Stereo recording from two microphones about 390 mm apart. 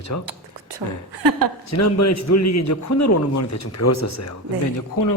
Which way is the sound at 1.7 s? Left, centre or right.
Left.